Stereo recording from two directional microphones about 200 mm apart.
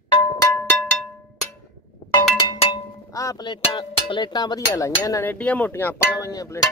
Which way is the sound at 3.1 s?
20° left (ahead or behind).